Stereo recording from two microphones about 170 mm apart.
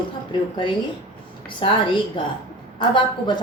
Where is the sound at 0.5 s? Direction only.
30° left (ahead or behind).